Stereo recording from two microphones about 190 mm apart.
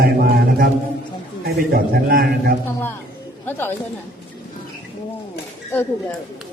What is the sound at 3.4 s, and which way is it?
Speech, 10° left (ahead or behind).